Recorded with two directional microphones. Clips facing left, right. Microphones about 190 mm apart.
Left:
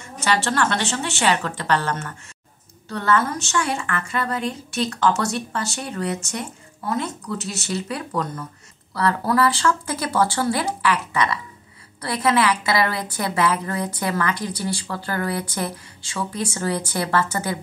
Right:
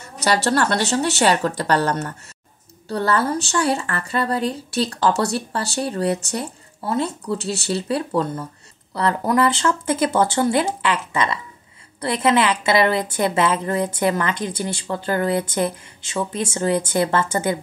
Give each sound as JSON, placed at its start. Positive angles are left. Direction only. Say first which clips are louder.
{"t": 0.0, "sound": "a woman's voice", "louder": "right 3 dB", "side_deg": -40}